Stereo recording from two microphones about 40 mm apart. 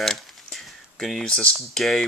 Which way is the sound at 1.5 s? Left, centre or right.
Centre.